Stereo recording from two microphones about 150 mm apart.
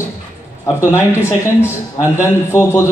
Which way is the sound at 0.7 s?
15° left (ahead or behind).